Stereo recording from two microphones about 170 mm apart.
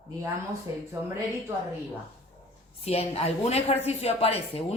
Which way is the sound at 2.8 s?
35° left (ahead or behind).